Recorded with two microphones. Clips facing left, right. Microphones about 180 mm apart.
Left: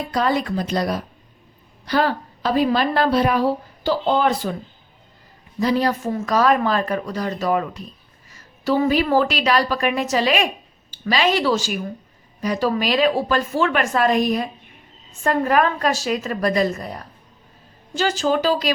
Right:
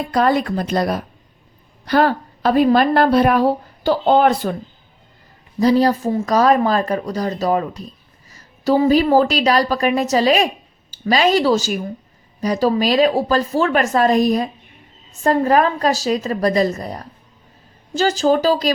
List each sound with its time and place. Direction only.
0.1 s a woman's voice: 55° right (ahead or behind)
5.5 s speech: 35° right (ahead or behind)